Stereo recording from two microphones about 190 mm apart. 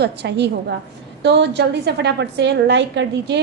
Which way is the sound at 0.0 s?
60° right (ahead or behind).